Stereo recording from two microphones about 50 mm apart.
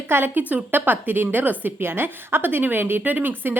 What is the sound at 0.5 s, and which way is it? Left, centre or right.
A woman's voice, right.